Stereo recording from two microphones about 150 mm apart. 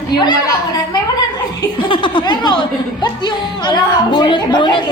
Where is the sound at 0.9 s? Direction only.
25° left (ahead or behind).